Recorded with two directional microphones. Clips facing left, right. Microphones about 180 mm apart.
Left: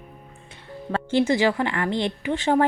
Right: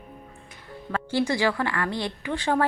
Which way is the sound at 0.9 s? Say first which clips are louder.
Left 4 dB; 20° left (ahead or behind).